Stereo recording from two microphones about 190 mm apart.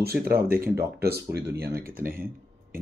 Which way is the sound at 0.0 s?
50° right (ahead or behind).